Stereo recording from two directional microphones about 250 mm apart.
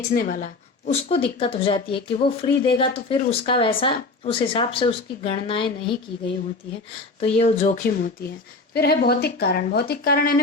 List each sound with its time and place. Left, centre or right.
0.1 s speech: left
0.9 s speech: left
7.2 s speech: left